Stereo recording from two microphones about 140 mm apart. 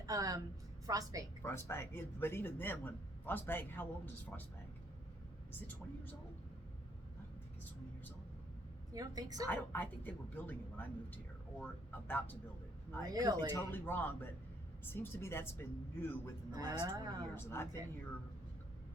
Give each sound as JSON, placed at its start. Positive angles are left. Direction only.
{"t": 0.0, "sound": "a sound", "side_deg": -25}
{"t": 0.9, "sound": "speech", "side_deg": -25}
{"t": 1.4, "sound": "speech", "side_deg": 20}
{"t": 5.5, "sound": "speech", "side_deg": 15}
{"t": 8.9, "sound": "speech", "side_deg": -25}
{"t": 9.5, "sound": "speech", "side_deg": 15}
{"t": 13.0, "sound": "speech", "side_deg": -30}
{"t": 13.5, "sound": "speech", "side_deg": 15}
{"t": 16.5, "sound": "speech", "side_deg": -30}
{"t": 17.3, "sound": "speech", "side_deg": 15}